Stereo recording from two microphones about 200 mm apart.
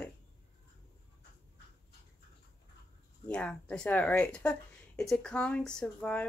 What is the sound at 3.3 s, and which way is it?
Speech, 5° left (ahead or behind).